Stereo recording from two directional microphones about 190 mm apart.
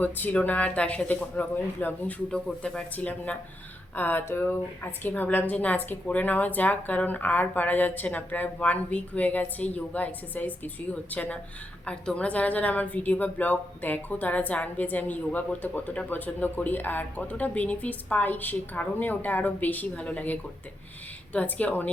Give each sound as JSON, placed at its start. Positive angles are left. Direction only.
{"t": 0.0, "sound": "a woman's voice", "side_deg": 10}